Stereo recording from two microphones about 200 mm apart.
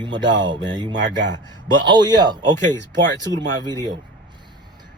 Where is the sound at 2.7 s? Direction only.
60° right (ahead or behind).